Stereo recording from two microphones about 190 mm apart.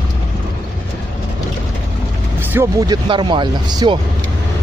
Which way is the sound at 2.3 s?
15° right (ahead or behind).